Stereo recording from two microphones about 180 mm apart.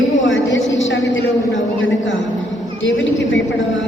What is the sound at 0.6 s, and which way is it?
Speech, centre (ahead or behind).